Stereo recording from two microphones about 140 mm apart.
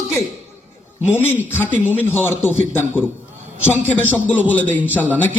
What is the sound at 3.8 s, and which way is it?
A man's voice, 15° left (ahead or behind).